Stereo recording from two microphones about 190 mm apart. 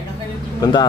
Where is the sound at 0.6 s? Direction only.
20° left (ahead or behind).